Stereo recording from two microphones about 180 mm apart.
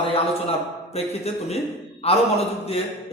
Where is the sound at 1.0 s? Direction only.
35° left (ahead or behind).